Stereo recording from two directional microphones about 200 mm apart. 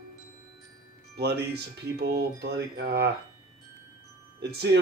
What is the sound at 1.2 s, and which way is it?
Speech, 55° right (ahead or behind).